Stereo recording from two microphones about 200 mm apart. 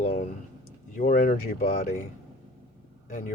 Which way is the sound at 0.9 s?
40° left (ahead or behind).